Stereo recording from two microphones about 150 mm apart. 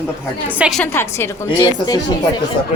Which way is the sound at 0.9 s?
15° left (ahead or behind).